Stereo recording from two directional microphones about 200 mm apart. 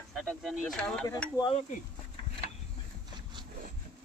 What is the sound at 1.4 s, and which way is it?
Speech, 25° left (ahead or behind).